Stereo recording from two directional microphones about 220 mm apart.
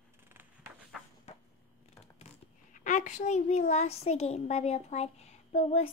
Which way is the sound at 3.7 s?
30° left (ahead or behind).